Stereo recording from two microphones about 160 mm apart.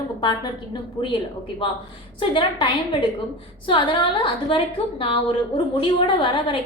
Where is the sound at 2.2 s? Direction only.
30° left (ahead or behind).